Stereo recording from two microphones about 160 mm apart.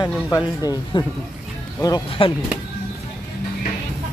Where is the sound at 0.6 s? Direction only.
25° left (ahead or behind).